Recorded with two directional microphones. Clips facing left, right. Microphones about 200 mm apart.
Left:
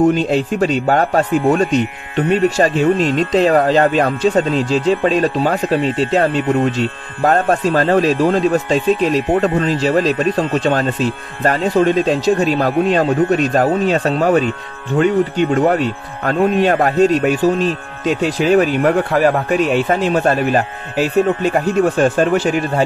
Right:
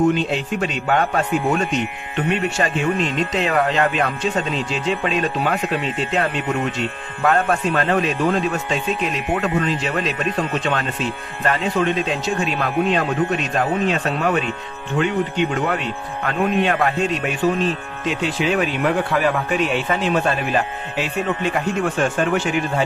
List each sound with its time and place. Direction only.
0.3 s speech: 40° left (ahead or behind)